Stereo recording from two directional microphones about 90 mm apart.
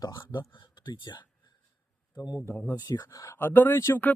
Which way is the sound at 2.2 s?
45° left (ahead or behind).